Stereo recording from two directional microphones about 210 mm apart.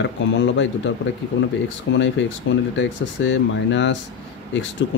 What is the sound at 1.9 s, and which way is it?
Speech, 60° left (ahead or behind).